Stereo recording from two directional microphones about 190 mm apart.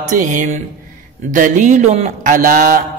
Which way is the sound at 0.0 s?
40° right (ahead or behind).